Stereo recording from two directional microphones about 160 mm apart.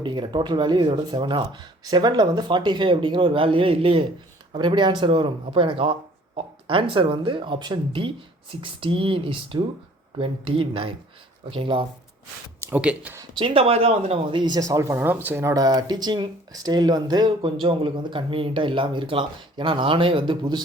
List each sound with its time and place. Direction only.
0.0 s speech: 30° right (ahead or behind)
12.5 s speech: 10° right (ahead or behind)
13.3 s speech: 35° right (ahead or behind)